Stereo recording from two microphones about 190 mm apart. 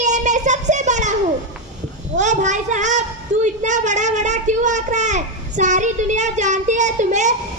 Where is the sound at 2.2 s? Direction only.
40° right (ahead or behind).